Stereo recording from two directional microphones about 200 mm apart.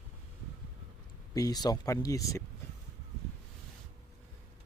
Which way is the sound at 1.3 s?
20° left (ahead or behind).